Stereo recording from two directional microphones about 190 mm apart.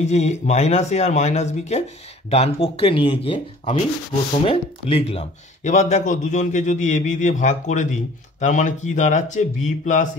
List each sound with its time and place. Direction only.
0.0 s speech: 35° left (ahead or behind)